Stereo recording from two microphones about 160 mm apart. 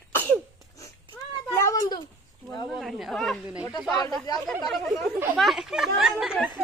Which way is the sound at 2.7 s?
Centre (ahead or behind).